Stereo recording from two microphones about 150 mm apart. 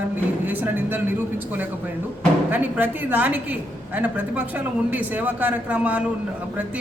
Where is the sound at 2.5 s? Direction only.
10° right (ahead or behind).